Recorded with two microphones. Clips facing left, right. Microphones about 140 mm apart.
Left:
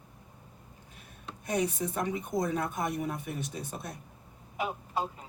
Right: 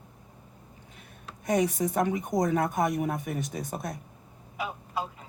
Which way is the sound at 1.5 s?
50° right (ahead or behind).